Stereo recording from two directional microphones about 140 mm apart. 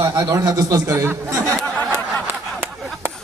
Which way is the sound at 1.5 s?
10° left (ahead or behind).